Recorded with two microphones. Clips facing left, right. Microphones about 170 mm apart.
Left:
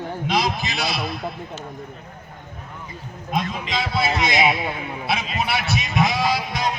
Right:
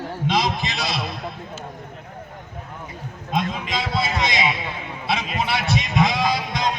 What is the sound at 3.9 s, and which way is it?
Speech, centre (ahead or behind).